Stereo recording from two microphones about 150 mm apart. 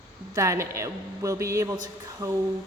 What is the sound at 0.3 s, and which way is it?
A woman's voice, 20° right (ahead or behind).